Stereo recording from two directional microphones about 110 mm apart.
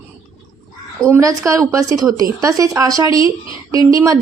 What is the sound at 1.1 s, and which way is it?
A woman's voice, 30° right (ahead or behind).